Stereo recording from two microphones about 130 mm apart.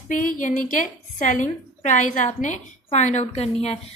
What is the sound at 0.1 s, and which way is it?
A woman's voice, 90° left.